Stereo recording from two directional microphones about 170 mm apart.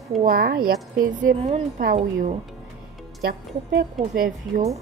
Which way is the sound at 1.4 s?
40° right (ahead or behind).